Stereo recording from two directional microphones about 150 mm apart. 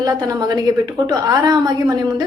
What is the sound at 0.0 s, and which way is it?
A woman's voice, 25° right (ahead or behind).